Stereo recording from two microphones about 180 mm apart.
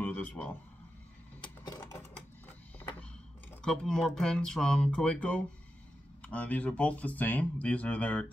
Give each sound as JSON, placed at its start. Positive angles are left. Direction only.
{"t": 0.0, "sound": "speech", "side_deg": 10}
{"t": 1.6, "sound": "sewing machine", "side_deg": 20}
{"t": 2.1, "sound": "printer", "side_deg": 10}
{"t": 3.6, "sound": "speech", "side_deg": 5}